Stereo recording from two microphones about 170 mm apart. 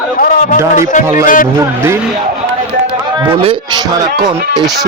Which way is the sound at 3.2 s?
30° right (ahead or behind).